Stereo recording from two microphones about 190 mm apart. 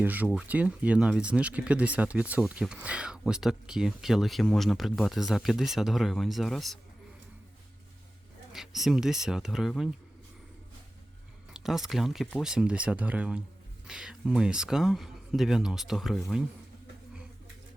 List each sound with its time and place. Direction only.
0.0 s speech: 10° right (ahead or behind)
8.5 s speech: centre (ahead or behind)
11.5 s speech: centre (ahead or behind)